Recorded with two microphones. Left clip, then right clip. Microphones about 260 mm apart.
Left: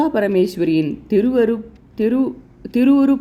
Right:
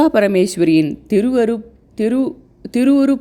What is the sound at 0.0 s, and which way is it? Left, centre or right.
Speech, right.